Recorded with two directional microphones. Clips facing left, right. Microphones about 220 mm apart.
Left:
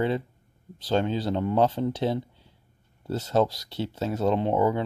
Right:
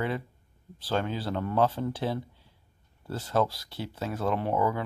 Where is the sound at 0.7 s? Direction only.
25° left (ahead or behind).